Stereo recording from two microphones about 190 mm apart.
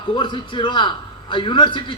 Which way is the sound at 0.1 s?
25° left (ahead or behind).